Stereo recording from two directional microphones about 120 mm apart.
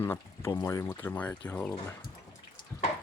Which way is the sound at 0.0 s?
20° left (ahead or behind).